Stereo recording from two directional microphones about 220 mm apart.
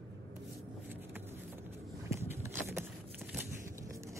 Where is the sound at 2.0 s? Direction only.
10° right (ahead or behind).